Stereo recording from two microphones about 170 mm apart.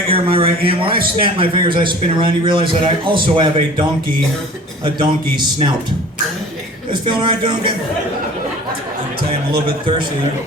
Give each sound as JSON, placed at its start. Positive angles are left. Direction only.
{"t": 0.1, "sound": "a man's voice", "side_deg": -30}
{"t": 4.9, "sound": "a man's voice", "side_deg": -25}
{"t": 7.0, "sound": "a man's voice", "side_deg": -25}